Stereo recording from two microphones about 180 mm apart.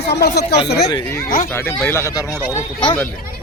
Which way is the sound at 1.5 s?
15° left (ahead or behind).